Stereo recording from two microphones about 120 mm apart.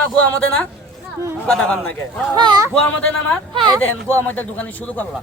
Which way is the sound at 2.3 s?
35° right (ahead or behind).